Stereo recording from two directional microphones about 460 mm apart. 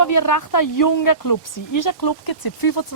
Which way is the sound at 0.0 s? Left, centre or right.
Left.